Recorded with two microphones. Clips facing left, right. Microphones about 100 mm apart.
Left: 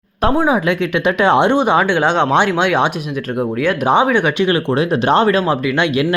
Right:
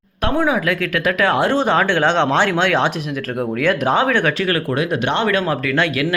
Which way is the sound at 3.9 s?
15° left (ahead or behind).